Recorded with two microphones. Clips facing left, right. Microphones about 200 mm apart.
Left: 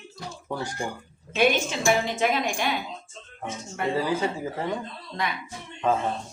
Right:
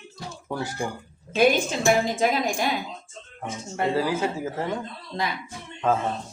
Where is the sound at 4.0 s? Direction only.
5° right (ahead or behind).